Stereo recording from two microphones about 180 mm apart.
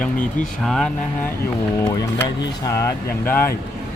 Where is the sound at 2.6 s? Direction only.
15° left (ahead or behind).